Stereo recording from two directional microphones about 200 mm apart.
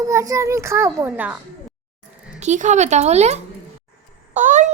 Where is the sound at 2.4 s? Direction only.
35° right (ahead or behind).